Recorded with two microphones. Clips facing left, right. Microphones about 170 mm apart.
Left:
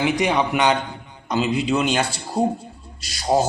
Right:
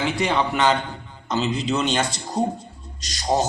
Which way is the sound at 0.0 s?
15° left (ahead or behind).